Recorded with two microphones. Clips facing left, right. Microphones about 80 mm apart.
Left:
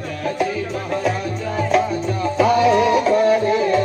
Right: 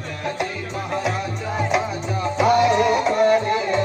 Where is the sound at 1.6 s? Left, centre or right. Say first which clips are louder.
Left 4 dB; centre.